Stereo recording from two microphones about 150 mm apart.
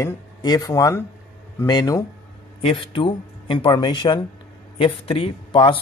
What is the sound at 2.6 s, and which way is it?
Speech, 35° left (ahead or behind).